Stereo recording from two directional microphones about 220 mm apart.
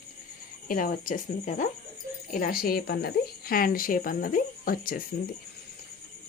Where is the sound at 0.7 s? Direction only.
40° left (ahead or behind).